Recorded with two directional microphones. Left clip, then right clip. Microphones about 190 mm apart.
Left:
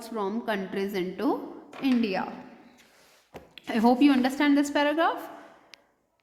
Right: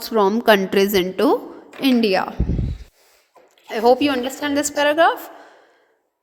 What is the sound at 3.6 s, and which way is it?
Speech, 30° right (ahead or behind).